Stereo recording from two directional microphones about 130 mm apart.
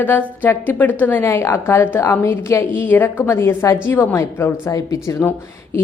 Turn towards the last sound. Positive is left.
turn(degrees=15)  # may be behind; listen again after turning